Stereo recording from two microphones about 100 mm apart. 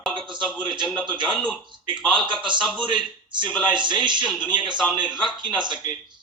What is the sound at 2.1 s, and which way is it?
Speech, 50° right (ahead or behind).